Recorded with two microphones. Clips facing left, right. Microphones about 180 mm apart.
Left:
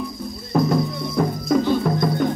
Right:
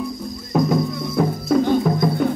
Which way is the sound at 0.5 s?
Centre (ahead or behind).